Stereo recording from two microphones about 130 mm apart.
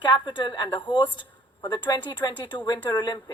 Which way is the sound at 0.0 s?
35° left (ahead or behind).